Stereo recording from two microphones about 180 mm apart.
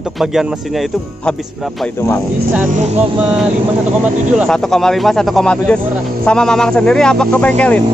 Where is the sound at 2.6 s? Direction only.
40° right (ahead or behind).